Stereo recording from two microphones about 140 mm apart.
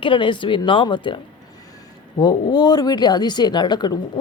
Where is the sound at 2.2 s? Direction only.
30° left (ahead or behind).